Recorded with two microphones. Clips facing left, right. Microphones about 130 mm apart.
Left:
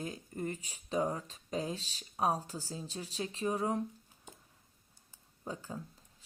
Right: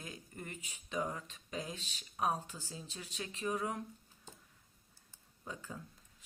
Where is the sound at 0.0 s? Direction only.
35° left (ahead or behind).